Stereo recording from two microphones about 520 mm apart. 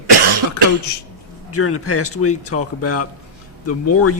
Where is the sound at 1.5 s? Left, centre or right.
Left.